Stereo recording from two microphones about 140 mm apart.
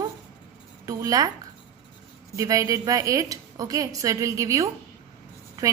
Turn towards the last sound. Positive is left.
turn(degrees=-25)  # may be behind; listen again after turning